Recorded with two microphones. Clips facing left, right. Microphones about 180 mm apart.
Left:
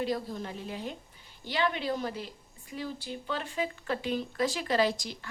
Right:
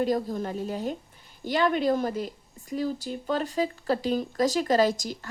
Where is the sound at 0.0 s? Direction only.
45° right (ahead or behind).